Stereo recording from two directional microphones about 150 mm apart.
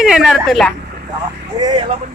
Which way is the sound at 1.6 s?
30° right (ahead or behind).